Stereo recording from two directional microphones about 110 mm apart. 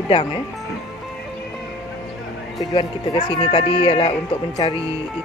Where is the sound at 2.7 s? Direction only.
60° left (ahead or behind).